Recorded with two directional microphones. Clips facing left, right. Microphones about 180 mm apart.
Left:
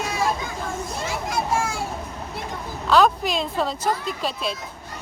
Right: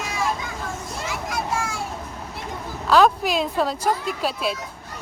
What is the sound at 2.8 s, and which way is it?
Speech, 5° right (ahead or behind).